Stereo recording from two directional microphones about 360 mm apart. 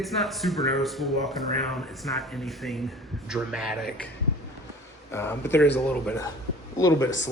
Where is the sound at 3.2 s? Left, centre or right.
Centre.